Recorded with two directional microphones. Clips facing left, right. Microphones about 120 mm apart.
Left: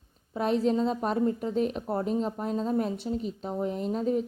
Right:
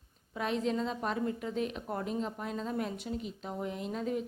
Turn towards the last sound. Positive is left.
turn(degrees=35)  # may be behind; listen again after turning